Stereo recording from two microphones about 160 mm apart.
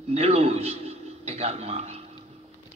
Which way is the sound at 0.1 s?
40° right (ahead or behind).